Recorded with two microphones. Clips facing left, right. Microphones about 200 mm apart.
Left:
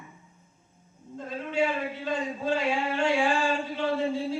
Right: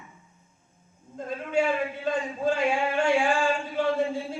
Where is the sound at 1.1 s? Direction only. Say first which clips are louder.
Right 3 dB; 50° right (ahead or behind).